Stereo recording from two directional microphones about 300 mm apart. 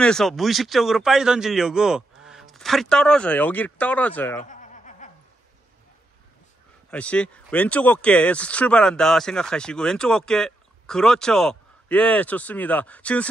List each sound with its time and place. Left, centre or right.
0.0 s speech: centre
4.5 s snicker: left
6.9 s speech: centre